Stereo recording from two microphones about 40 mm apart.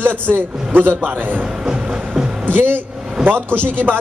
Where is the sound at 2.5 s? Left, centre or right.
Right.